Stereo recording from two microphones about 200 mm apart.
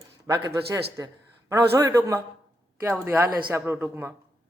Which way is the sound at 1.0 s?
15° right (ahead or behind).